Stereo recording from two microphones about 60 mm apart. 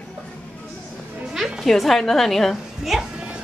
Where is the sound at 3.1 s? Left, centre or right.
Centre.